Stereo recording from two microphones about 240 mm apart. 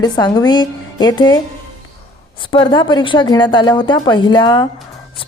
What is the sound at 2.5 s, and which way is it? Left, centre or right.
A woman's voice, centre.